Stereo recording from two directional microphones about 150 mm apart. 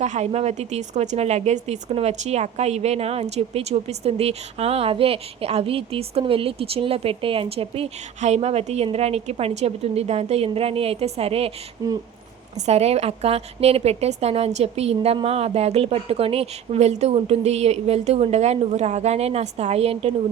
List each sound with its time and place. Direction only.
0.0 s speech: 50° right (ahead or behind)
11.8 s speech: 25° right (ahead or behind)
12.5 s speech: 45° right (ahead or behind)